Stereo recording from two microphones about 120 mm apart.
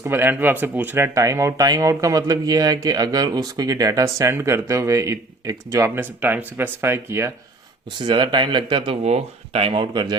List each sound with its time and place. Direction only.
0.0 s speech: 20° right (ahead or behind)
7.9 s speech: 40° right (ahead or behind)
9.0 s speech: 60° right (ahead or behind); by 10.2 s 35° right (ahead or behind)